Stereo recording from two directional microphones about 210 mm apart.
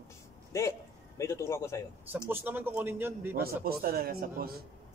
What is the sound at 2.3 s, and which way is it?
A man's voice, 10° right (ahead or behind).